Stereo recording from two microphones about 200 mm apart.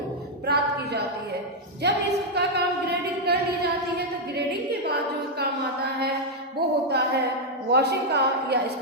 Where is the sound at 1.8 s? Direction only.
55° right (ahead or behind).